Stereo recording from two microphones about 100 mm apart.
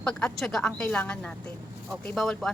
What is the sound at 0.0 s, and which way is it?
Speech, 5° left (ahead or behind).